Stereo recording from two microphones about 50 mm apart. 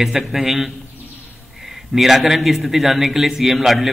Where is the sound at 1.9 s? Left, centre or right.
Centre.